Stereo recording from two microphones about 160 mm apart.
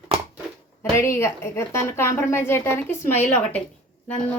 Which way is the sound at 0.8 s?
15° left (ahead or behind).